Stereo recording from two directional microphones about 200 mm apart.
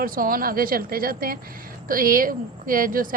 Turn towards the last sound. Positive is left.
turn(degrees=-45)  # may be behind; listen again after turning